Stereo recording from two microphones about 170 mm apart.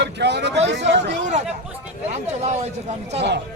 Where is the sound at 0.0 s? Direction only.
85° right.